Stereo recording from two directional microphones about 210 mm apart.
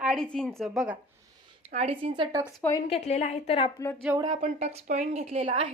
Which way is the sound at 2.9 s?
30° left (ahead or behind).